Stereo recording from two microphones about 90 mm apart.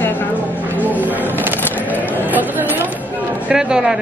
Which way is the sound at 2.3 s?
20° right (ahead or behind).